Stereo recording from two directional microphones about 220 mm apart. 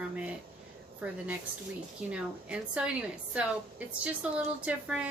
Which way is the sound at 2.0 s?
5° right (ahead or behind).